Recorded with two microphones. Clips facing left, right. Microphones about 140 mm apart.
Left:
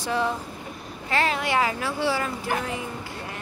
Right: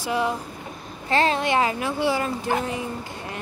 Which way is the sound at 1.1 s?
25° right (ahead or behind).